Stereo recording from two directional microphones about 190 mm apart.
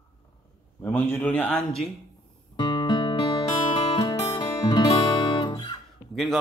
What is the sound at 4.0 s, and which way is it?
Guitar, 20° left (ahead or behind).